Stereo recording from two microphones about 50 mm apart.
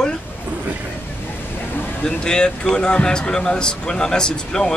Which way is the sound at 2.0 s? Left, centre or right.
Centre.